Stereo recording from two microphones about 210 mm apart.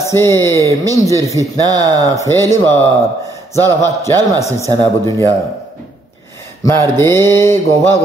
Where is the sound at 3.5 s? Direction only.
10° left (ahead or behind).